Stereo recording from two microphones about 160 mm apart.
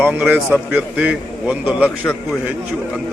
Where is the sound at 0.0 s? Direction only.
10° right (ahead or behind).